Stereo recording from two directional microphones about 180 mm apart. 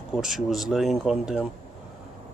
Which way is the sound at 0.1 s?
Centre (ahead or behind).